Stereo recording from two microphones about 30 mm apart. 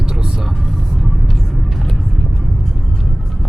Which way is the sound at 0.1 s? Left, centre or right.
Centre.